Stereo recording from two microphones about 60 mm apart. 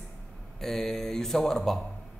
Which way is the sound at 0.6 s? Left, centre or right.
Centre.